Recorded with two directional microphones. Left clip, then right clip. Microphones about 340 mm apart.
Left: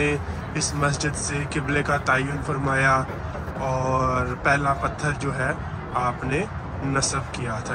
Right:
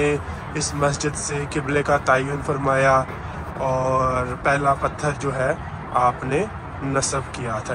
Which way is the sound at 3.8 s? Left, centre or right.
Centre.